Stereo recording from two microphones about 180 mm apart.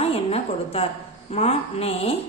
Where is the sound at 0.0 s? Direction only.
35° left (ahead or behind).